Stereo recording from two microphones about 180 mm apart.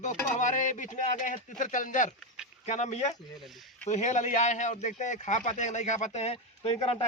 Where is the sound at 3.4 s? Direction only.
Centre (ahead or behind).